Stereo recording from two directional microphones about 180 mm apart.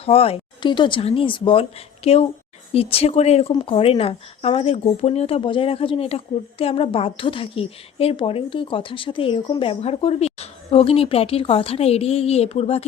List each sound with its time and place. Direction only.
0.0 s speech: 35° left (ahead or behind)